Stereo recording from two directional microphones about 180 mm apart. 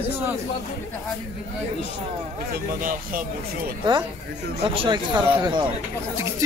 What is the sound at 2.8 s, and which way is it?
Speech, 50° right (ahead or behind).